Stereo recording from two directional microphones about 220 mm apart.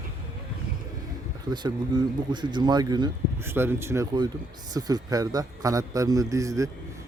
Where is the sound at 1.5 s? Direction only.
20° right (ahead or behind).